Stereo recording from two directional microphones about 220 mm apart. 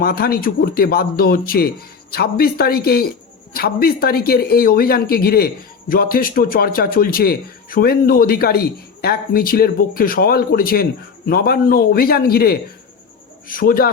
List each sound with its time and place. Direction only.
0.0 s a man's voice: 40° left (ahead or behind)